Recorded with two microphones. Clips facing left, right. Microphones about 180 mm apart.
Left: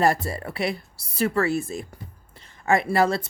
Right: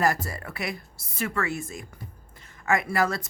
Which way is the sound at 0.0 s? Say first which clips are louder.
Left 4 dB; 30° left (ahead or behind).